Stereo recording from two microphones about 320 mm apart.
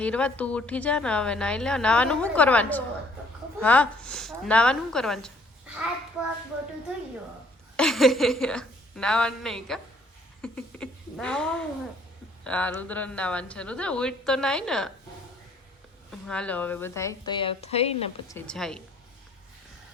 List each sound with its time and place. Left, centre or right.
0.0 s a woman's voice: centre
7.8 s a woman's voice: centre
10.4 s a sound: centre
12.5 s a woman's voice: centre
16.2 s a woman's voice: centre
18.3 s a woman's voice: centre